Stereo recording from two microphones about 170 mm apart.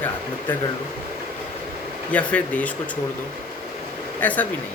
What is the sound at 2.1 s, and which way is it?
Speech, 10° left (ahead or behind).